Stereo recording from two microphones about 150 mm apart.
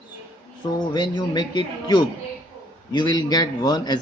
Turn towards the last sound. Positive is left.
turn(degrees=25)  # may be behind; listen again after turning